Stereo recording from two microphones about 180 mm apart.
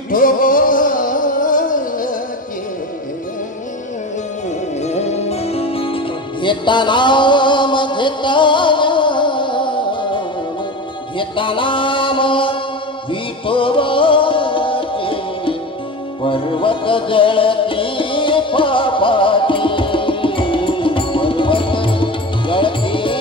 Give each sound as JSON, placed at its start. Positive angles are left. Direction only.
{"t": 0.1, "sound": "music", "side_deg": 50}
{"t": 4.8, "sound": "music", "side_deg": 35}
{"t": 11.1, "sound": "mantra", "side_deg": 30}
{"t": 13.1, "sound": "music", "side_deg": 30}